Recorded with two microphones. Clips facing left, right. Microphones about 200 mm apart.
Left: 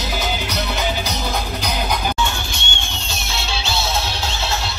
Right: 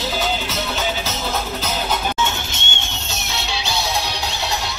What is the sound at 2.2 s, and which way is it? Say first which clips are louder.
Music: even; 20° right (ahead or behind).